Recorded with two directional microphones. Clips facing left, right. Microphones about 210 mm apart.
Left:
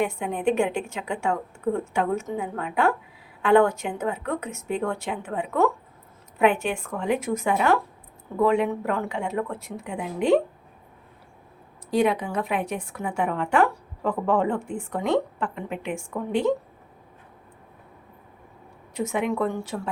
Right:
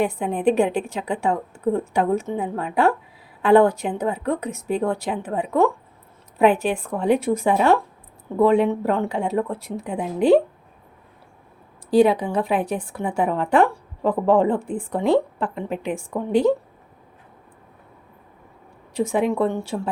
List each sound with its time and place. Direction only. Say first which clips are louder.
0.0 s a woman's voice: right 4 dB; 35° right (ahead or behind)
11.9 s a woman's voice: right 6 dB; 30° right (ahead or behind)
18.9 s speech: right 5 dB; 30° right (ahead or behind)